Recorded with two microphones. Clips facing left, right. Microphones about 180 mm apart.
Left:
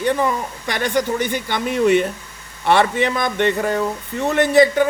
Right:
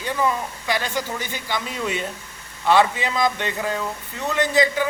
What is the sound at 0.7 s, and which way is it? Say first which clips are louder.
Speech: left 6 dB; 60° left (ahead or behind).